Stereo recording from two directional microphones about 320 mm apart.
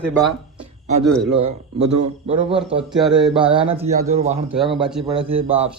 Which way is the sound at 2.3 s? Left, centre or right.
Centre.